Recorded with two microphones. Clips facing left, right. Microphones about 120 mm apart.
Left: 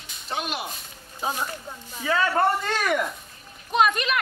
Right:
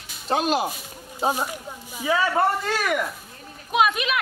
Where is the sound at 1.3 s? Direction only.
10° right (ahead or behind).